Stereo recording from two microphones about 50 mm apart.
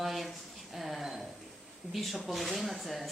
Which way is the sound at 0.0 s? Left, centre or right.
Centre.